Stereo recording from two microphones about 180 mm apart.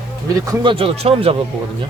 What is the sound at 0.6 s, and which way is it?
Speech, 30° right (ahead or behind).